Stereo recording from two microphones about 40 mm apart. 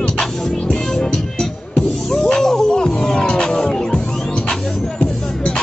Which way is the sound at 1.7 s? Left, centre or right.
Centre.